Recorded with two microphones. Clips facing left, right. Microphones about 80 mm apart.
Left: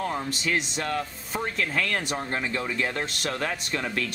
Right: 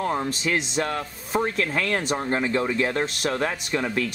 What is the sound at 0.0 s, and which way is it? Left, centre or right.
Speech, right.